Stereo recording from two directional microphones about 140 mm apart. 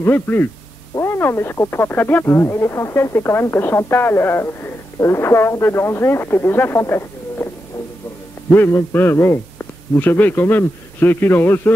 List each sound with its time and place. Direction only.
0.0 s speech: 15° left (ahead or behind)
8.5 s speech: 15° left (ahead or behind)